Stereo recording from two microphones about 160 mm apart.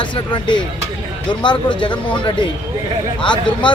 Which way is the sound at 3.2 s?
30° left (ahead or behind).